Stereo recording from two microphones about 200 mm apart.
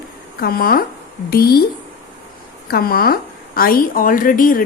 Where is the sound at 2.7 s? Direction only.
50° left (ahead or behind).